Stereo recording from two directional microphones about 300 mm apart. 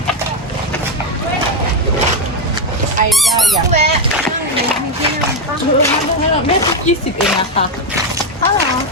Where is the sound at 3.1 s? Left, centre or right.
Centre.